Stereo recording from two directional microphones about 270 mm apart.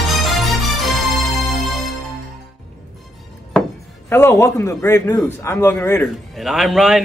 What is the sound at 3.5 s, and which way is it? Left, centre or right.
Speech, centre.